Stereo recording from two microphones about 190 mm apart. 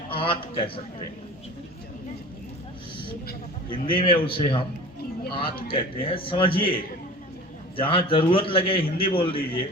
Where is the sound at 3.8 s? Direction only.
25° left (ahead or behind).